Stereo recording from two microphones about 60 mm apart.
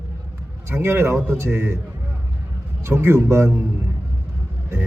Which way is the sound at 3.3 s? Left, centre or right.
Right.